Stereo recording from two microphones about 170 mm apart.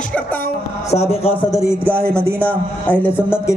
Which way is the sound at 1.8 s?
10° right (ahead or behind).